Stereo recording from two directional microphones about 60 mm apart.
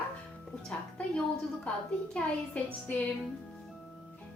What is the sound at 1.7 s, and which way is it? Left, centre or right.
A woman's voice, left.